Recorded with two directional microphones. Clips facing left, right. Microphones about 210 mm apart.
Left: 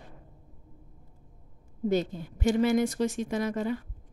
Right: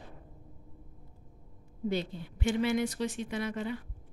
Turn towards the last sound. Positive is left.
turn(degrees=45)  # may be behind; listen again after turning